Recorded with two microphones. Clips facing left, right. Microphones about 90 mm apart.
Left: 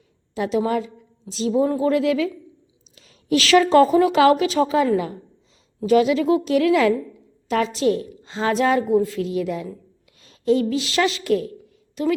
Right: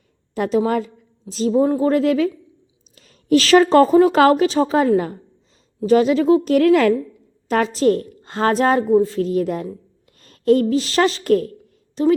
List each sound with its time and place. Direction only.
0.3 s a woman's voice: 45° right (ahead or behind)
10.2 s a sound: 50° right (ahead or behind)
10.7 s speech: 40° right (ahead or behind)
12.0 s speech: 35° right (ahead or behind)